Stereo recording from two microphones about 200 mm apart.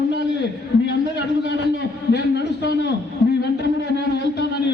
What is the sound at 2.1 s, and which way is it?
Speech, 55° left (ahead or behind).